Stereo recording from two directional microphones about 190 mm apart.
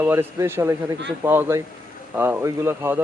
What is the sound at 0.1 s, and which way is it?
Speech, 10° right (ahead or behind).